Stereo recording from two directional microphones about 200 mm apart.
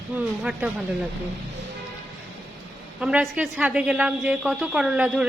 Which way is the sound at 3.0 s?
5° right (ahead or behind).